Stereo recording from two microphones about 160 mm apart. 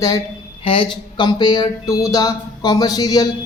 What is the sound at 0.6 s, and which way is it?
A woman's voice, 35° left (ahead or behind).